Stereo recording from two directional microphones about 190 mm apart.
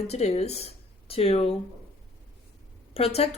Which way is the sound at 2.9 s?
30° left (ahead or behind).